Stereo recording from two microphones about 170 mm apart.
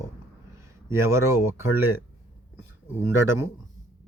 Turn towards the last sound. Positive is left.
turn(degrees=-15)  # may be behind; listen again after turning